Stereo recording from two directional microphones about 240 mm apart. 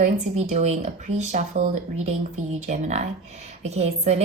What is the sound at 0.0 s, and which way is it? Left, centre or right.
A woman's voice, right.